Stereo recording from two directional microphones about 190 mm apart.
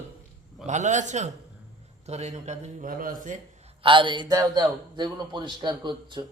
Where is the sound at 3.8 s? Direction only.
25° right (ahead or behind).